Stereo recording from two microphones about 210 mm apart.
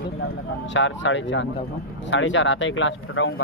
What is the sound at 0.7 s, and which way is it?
Speech, 60° left (ahead or behind).